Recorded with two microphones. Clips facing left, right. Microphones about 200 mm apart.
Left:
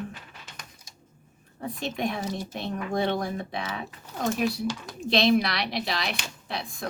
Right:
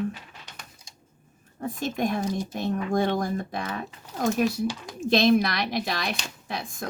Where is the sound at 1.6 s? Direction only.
45° right (ahead or behind).